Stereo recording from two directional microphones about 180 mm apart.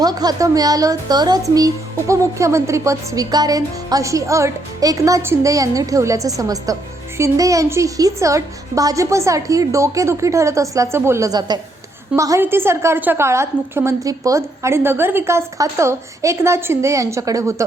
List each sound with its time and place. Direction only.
0.0 s a woman's voice: 20° right (ahead or behind)